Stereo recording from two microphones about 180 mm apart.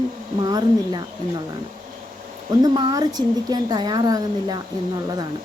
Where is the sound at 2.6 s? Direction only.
25° right (ahead or behind).